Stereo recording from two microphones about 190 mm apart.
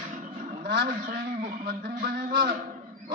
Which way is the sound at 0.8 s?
50° right (ahead or behind).